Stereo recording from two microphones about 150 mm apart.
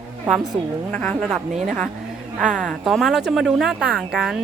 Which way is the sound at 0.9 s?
10° left (ahead or behind).